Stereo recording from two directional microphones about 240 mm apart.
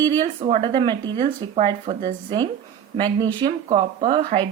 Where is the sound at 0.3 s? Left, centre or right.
Right.